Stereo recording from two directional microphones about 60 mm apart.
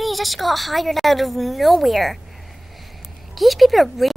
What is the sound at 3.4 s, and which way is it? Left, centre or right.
Speech, centre.